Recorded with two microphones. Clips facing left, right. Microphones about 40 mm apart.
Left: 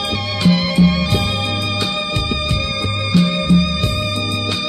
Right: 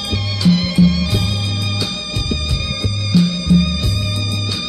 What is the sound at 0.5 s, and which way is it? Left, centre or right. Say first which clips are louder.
Music: even; centre.